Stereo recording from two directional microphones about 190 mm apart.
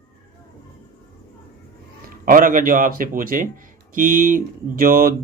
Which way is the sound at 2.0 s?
45° right (ahead or behind).